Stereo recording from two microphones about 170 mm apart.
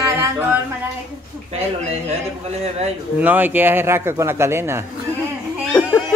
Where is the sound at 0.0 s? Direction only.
15° right (ahead or behind).